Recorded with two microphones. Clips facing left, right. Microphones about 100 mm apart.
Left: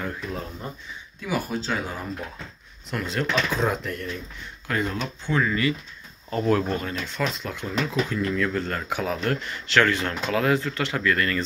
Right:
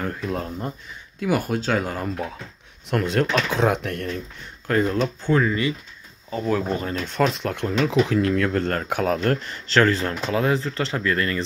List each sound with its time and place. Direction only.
0.0 s speech: 50° right (ahead or behind)
1.2 s speech: 60° right (ahead or behind)
4.6 s speech: 40° right (ahead or behind)
6.3 s speech: 5° right (ahead or behind)
7.1 s speech: 55° right (ahead or behind); by 11.4 s 25° right (ahead or behind)